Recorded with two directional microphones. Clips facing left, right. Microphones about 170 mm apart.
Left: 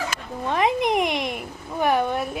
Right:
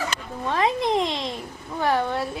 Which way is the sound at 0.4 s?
15° left (ahead or behind).